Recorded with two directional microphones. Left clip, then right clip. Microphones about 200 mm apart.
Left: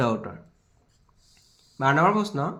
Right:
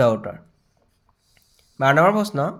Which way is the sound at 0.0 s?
35° right (ahead or behind).